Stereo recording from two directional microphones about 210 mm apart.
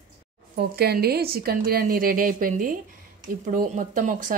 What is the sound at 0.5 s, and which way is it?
A woman's voice, 50° right (ahead or behind).